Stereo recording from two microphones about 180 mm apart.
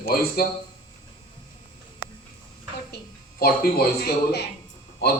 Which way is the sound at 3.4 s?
55° left (ahead or behind).